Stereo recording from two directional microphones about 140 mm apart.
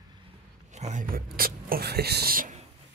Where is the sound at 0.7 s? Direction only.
55° right (ahead or behind); by 1.8 s 90° right.